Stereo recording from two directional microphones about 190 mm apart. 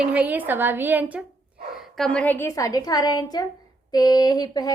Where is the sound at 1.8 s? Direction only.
Centre (ahead or behind).